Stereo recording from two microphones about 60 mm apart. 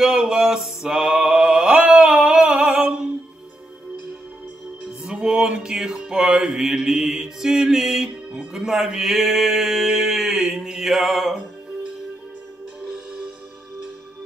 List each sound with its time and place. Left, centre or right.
0.0 s mantra: centre
5.0 s music: centre
12.9 s music: centre